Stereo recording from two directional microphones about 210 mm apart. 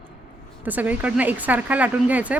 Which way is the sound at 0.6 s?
10° right (ahead or behind).